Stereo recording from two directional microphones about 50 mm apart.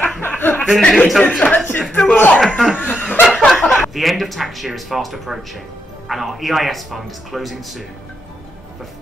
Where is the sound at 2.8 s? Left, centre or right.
Left.